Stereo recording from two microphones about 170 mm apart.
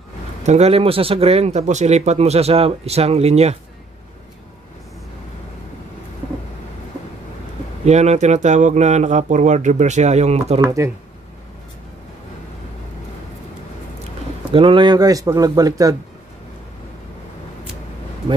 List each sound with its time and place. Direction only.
0.4 s speech: 40° right (ahead or behind)
7.8 s speech: 40° right (ahead or behind)
10.6 s speech: 15° right (ahead or behind)
14.5 s a man's voice: 30° right (ahead or behind)